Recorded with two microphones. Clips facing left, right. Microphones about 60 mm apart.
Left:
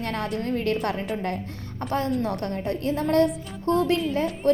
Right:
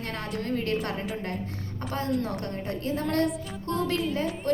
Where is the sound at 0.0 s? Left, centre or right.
Left.